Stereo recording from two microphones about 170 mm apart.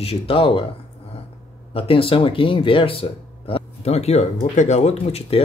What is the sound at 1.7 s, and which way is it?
Speech, 35° left (ahead or behind).